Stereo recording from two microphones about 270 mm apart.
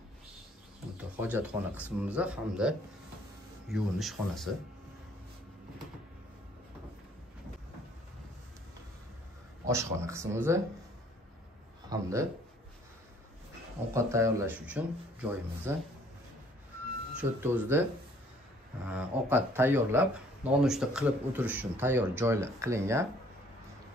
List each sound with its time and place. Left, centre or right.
1.2 s speech: centre
9.7 s speech: centre
11.9 s speech: centre
13.9 s speech: centre
17.2 s speech: centre
18.9 s speech: centre